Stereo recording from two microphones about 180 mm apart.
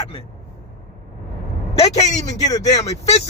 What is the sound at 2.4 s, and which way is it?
Speech, 20° left (ahead or behind).